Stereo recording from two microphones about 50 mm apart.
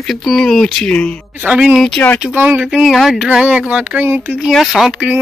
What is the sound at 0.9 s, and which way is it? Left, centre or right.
Speech, left.